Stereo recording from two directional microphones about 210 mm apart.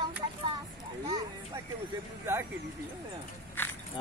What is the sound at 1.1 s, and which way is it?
Music, 20° right (ahead or behind).